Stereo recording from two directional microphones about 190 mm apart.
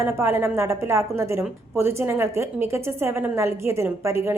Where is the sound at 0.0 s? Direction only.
10° right (ahead or behind).